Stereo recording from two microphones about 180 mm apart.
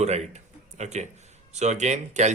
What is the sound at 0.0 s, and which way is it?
Speech, 40° right (ahead or behind).